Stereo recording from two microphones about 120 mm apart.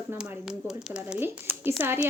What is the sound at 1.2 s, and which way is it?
Speech, 15° right (ahead or behind).